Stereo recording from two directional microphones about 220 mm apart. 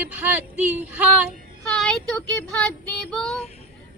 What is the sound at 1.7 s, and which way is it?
Speech, 5° left (ahead or behind).